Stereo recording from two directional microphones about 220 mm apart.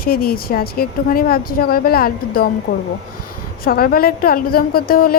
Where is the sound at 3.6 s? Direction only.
40° left (ahead or behind).